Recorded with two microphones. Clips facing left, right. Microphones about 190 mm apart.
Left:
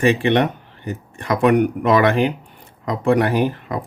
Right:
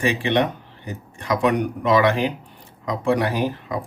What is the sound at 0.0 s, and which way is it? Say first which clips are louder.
Speech: left 4 dB; 55° left (ahead or behind).